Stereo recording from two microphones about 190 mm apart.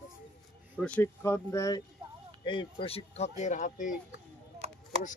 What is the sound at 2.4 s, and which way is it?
Speech, 25° left (ahead or behind).